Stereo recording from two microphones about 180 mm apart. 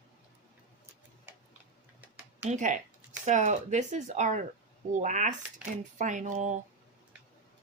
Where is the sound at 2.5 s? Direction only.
45° right (ahead or behind).